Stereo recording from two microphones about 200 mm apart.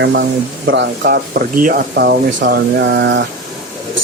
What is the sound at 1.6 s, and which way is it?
Speech, 45° right (ahead or behind).